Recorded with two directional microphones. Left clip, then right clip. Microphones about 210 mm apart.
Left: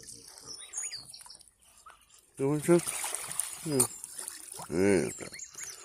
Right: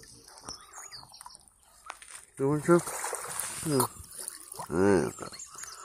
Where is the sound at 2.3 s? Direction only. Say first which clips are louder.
Right 2 dB; 10° left (ahead or behind).